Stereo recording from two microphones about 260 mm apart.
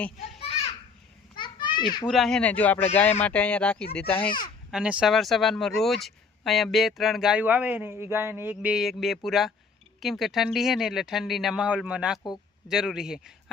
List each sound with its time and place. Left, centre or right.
1.4 s children playing: centre
2.0 s speech: centre